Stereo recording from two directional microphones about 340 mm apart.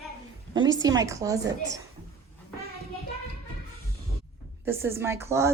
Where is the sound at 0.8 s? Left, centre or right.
Centre.